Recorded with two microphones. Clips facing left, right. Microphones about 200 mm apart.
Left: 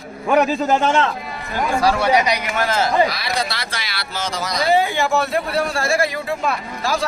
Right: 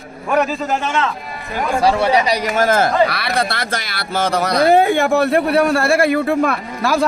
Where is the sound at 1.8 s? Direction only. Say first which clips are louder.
Right 2 dB; 30° right (ahead or behind).